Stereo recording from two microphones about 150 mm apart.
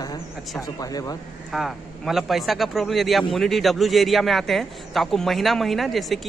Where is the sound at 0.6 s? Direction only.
25° left (ahead or behind).